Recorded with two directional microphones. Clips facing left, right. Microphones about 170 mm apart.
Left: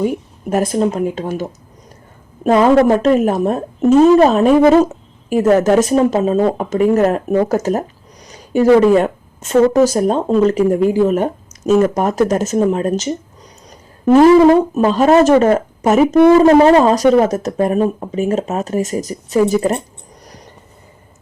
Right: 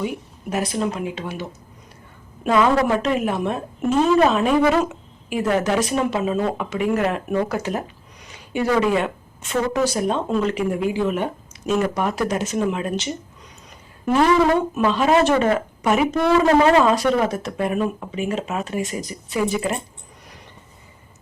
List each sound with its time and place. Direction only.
0.5 s speech: 45° left (ahead or behind)